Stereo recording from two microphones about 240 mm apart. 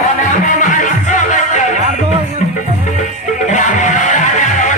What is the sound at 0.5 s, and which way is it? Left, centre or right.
Music, left.